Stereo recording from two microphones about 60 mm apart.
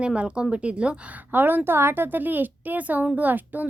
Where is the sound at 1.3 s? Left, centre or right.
Right.